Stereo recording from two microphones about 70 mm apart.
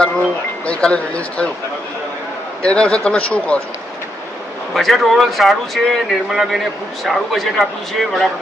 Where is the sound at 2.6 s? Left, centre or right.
Centre.